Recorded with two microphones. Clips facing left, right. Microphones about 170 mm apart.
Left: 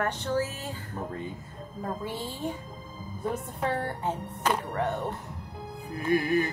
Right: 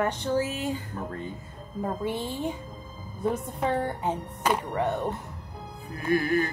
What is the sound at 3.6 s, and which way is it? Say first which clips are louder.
Speech: right 2 dB; 15° right (ahead or behind).